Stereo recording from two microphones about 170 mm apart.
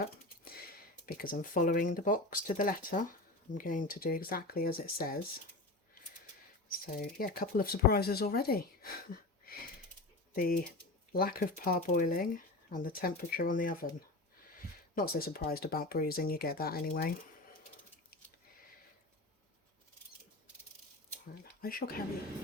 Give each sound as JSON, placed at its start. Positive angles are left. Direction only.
{"t": 0.0, "sound": "speech", "side_deg": 60}
{"t": 7.2, "sound": "speech", "side_deg": 60}
{"t": 21.3, "sound": "speech", "side_deg": 60}